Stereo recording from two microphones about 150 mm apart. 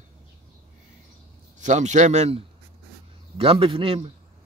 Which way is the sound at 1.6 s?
55° right (ahead or behind).